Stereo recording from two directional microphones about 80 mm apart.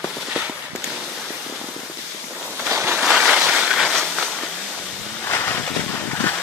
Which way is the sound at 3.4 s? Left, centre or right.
Centre.